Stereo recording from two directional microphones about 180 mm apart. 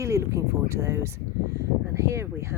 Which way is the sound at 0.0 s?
15° right (ahead or behind).